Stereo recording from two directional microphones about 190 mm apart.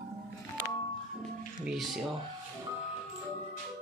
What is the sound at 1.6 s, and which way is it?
Speech, centre (ahead or behind).